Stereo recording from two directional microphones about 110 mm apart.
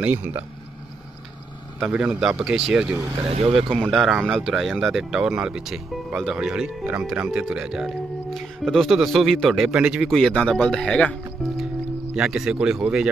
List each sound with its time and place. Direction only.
0.0 s speech: 15° right (ahead or behind)
1.8 s speech: 10° right (ahead or behind)
3.3 s speech: 60° right (ahead or behind)
3.9 s speech: centre (ahead or behind)
10.0 s speech: 5° left (ahead or behind)
12.2 s speech: 5° right (ahead or behind)